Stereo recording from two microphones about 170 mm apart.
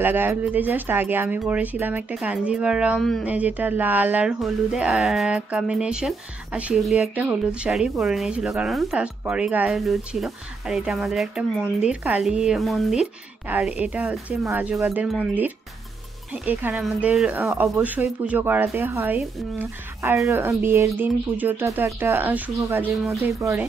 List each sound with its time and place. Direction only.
0.0 s speech: 10° right (ahead or behind)
3.3 s speech: 10° right (ahead or behind)